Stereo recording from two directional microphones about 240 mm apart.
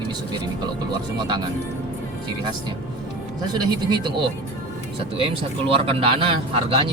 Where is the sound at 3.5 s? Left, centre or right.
Centre.